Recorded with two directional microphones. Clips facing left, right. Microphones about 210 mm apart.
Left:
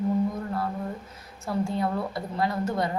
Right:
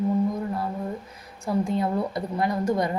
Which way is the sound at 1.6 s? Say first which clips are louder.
Right 1 dB; 20° right (ahead or behind).